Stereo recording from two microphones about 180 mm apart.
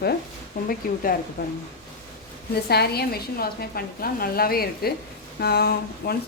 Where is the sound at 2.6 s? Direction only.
60° left (ahead or behind).